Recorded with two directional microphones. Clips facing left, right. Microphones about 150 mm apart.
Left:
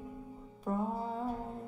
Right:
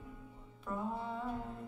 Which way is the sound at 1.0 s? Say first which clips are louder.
Left 4 dB; 35° left (ahead or behind).